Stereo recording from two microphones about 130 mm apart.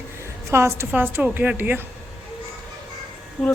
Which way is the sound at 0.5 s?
20° right (ahead or behind).